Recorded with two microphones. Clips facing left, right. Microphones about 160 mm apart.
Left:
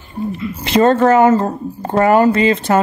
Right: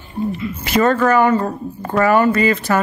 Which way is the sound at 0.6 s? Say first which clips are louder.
Left 4 dB; 25° left (ahead or behind).